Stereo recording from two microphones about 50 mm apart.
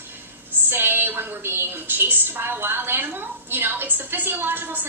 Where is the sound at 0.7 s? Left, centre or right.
Right.